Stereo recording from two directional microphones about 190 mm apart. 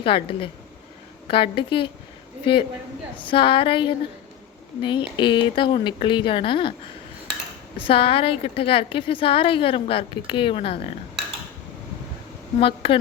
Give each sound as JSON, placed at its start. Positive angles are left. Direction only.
{"t": 0.0, "sound": "a woman's voice", "side_deg": 30}
{"t": 3.2, "sound": "a woman's voice", "side_deg": 25}
{"t": 7.8, "sound": "a woman's voice", "side_deg": 30}
{"t": 12.5, "sound": "a woman's voice", "side_deg": 30}